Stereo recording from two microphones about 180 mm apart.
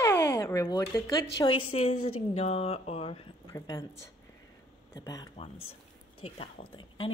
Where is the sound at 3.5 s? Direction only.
15° left (ahead or behind).